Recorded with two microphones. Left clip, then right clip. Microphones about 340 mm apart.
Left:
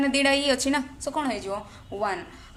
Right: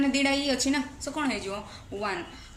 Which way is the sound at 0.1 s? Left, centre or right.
Left.